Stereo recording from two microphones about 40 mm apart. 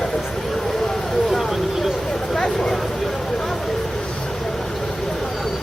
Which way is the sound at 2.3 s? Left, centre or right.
Centre.